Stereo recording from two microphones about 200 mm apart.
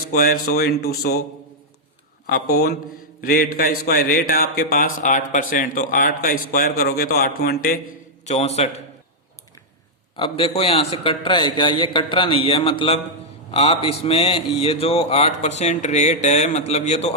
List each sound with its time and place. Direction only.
0.1 s a man's voice: 50° left (ahead or behind)
3.2 s a man's voice: 45° left (ahead or behind)
10.2 s a man's voice: 25° left (ahead or behind)